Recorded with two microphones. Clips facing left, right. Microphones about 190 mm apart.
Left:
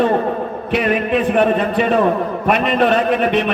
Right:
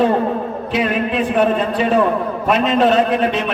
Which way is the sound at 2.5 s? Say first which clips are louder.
Right 1 dB; 60° left (ahead or behind).